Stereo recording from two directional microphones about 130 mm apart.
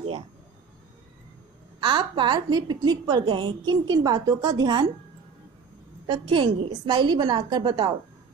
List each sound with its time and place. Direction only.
1.8 s a woman's voice: 35° right (ahead or behind)
6.0 s a woman's voice: 40° right (ahead or behind)